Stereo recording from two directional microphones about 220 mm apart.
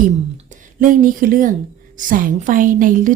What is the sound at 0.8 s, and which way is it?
Speech, 35° right (ahead or behind).